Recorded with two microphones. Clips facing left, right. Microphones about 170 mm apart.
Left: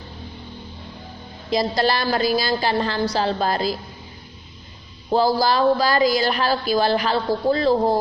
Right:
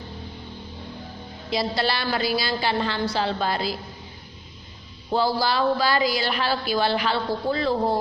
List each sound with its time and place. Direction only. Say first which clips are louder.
1.5 s a woman's voice: left 5 dB; 40° left (ahead or behind)
5.1 s a woman's voice: left 4 dB; 40° left (ahead or behind)